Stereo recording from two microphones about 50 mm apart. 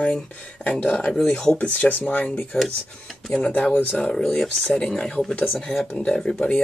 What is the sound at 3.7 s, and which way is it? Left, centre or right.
Speech, left.